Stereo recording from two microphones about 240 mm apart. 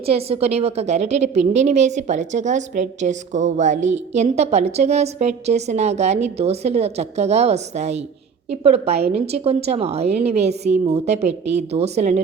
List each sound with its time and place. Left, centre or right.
0.0 s a woman's voice: right